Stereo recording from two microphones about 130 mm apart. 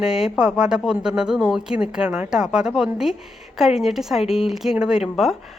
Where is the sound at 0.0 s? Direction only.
5° right (ahead or behind).